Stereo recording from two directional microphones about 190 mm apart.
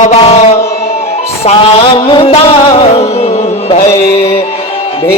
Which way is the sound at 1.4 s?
30° left (ahead or behind).